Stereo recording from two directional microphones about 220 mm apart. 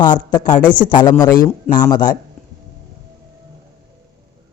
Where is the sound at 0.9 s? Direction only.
20° left (ahead or behind).